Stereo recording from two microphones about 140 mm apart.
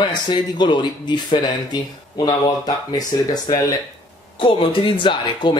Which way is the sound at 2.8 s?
30° left (ahead or behind).